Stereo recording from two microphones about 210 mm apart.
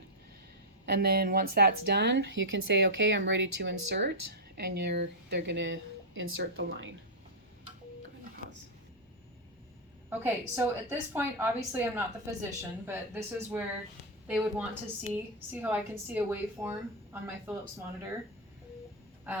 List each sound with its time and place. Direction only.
0.9 s speech: 50° right (ahead or behind); by 6.9 s 65° right (ahead or behind)
10.1 s a woman's voice: 10° right (ahead or behind)
19.3 s a woman's voice: 10° right (ahead or behind)